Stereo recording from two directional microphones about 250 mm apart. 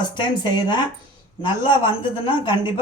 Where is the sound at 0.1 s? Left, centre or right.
Centre.